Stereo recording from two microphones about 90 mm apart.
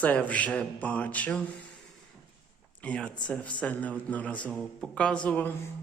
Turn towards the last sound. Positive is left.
turn(degrees=15)  # may be behind; listen again after turning